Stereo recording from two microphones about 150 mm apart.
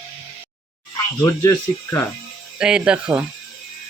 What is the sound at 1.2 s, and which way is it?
Speech, 20° left (ahead or behind).